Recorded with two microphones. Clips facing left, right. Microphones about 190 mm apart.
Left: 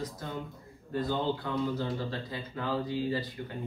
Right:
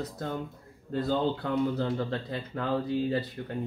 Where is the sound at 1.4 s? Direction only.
60° right (ahead or behind).